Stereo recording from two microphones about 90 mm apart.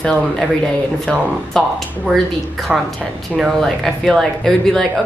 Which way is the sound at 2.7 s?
5° right (ahead or behind).